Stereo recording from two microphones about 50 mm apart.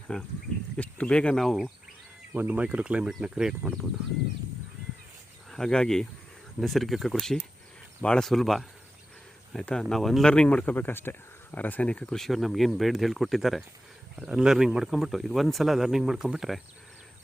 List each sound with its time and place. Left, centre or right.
0.1 s speech: centre
0.8 s speech: left
1.4 s speech: centre
2.3 s speech: right
2.6 s speech: right
5.5 s speech: centre
6.6 s speech: centre
9.5 s speech: centre
9.9 s speech: centre
10.2 s speech: centre
10.8 s speech: left
11.9 s speech: left
12.1 s speech: centre
14.2 s speech: centre